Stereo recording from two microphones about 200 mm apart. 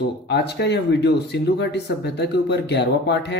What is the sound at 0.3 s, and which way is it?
Speech, 55° left (ahead or behind).